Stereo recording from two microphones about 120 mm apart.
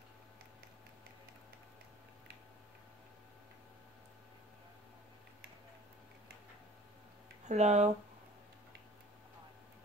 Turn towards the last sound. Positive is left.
turn(degrees=-70)  # may be behind; listen again after turning